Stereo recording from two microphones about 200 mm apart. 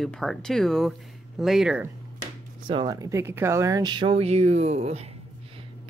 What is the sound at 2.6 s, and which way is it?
Speech, 20° right (ahead or behind).